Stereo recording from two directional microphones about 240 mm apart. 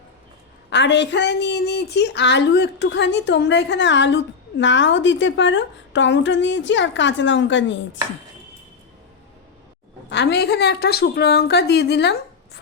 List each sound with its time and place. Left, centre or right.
0.7 s a woman's voice: left
10.1 s a woman's voice: left